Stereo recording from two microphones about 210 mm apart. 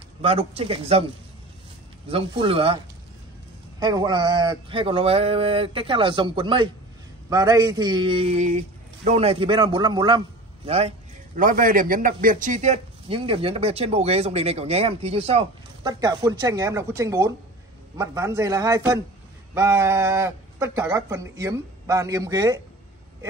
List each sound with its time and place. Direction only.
0.2 s a man's voice: 30° right (ahead or behind)
2.0 s a man's voice: 25° right (ahead or behind)
3.8 s a man's voice: 20° right (ahead or behind)
15.9 s speech: 20° right (ahead or behind)